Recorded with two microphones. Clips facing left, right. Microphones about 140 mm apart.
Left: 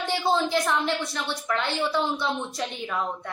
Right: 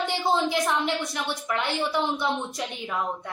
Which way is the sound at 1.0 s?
15° right (ahead or behind).